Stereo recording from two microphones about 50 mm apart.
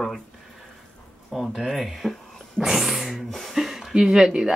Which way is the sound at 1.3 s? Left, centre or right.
Centre.